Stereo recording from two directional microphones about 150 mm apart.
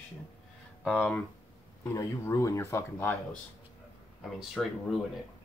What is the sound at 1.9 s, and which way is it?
Speech, 20° left (ahead or behind).